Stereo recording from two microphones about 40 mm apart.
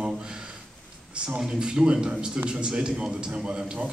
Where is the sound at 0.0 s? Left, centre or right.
Right.